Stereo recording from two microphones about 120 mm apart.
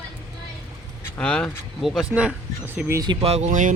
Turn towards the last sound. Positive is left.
turn(degrees=-80)